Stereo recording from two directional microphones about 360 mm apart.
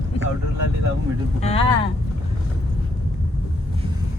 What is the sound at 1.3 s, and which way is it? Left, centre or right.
Speech, centre.